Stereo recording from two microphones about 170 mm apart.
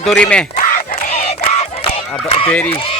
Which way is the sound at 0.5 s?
55° left (ahead or behind).